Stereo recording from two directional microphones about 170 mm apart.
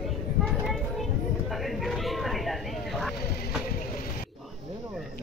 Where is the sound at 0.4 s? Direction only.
Centre (ahead or behind).